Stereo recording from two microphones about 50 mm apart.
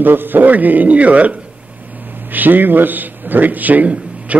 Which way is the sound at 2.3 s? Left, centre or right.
Right.